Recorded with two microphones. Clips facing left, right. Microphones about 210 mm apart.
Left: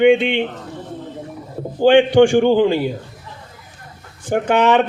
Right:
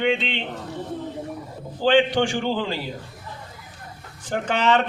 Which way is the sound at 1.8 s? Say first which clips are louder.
Left 8 dB; 55° left (ahead or behind).